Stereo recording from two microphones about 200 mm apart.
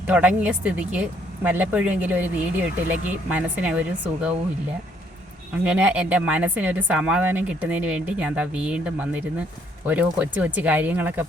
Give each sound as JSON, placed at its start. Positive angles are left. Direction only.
{"t": 0.1, "sound": "a woman's voice", "side_deg": -5}
{"t": 5.6, "sound": "a woman's voice", "side_deg": -5}